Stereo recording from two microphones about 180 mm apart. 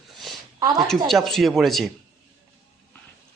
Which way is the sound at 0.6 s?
20° right (ahead or behind).